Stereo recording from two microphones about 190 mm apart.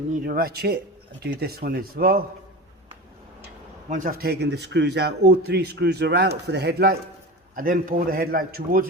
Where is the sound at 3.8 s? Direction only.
45° right (ahead or behind); by 6.9 s 60° right (ahead or behind).